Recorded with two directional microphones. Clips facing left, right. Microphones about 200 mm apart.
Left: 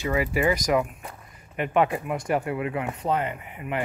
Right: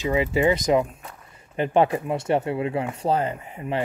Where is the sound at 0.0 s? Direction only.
25° right (ahead or behind).